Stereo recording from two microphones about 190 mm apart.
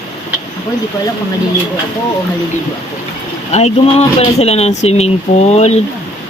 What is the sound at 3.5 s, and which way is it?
Speech, 35° left (ahead or behind).